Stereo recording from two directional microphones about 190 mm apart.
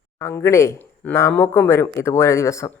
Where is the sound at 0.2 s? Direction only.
15° left (ahead or behind).